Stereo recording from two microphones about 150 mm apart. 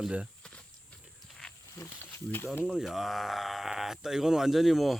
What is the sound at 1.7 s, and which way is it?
Snake, 15° left (ahead or behind).